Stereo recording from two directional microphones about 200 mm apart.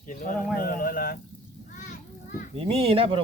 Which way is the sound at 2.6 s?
30° right (ahead or behind).